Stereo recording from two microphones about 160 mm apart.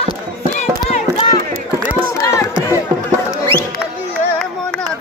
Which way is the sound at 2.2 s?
20° left (ahead or behind).